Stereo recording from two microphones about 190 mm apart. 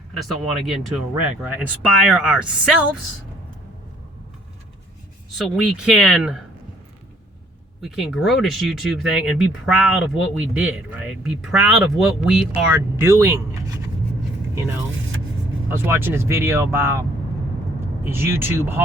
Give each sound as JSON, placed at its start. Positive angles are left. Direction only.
{"t": 0.2, "sound": "speech", "side_deg": 0}
{"t": 5.5, "sound": "speech", "side_deg": -5}
{"t": 7.8, "sound": "speech", "side_deg": 0}
{"t": 14.9, "sound": "vehicle", "side_deg": -90}
{"t": 15.7, "sound": "speech", "side_deg": -10}